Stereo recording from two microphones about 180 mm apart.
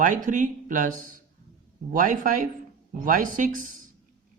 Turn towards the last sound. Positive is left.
turn(degrees=-45)  # may be behind; listen again after turning